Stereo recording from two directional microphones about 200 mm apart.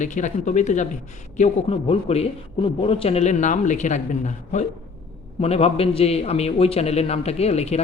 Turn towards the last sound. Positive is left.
turn(degrees=30)  # may be behind; listen again after turning